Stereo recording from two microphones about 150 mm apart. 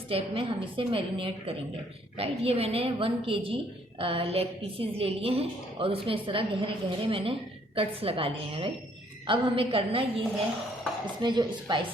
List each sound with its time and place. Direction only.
0.1 s a woman's voice: 35° right (ahead or behind)